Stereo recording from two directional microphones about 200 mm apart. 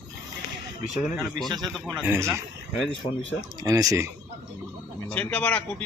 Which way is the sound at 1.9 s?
10° right (ahead or behind).